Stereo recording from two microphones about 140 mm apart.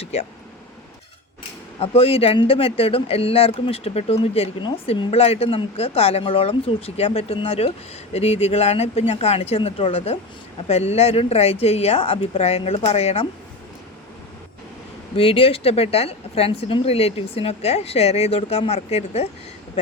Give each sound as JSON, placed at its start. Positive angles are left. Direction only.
{"t": 0.0, "sound": "speech", "side_deg": 45}
{"t": 1.8, "sound": "speech", "side_deg": 45}
{"t": 15.1, "sound": "speech", "side_deg": 40}